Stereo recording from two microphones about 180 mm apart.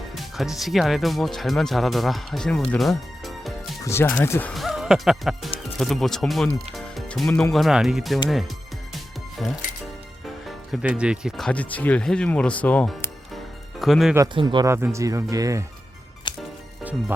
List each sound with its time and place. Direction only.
0.1 s speech: centre (ahead or behind)
3.8 s speech: 15° left (ahead or behind)
6.7 s music: centre (ahead or behind)
7.5 s speech: centre (ahead or behind)
9.4 s speech: centre (ahead or behind)
14.3 s speech: 25° right (ahead or behind)
16.3 s music: 25° left (ahead or behind)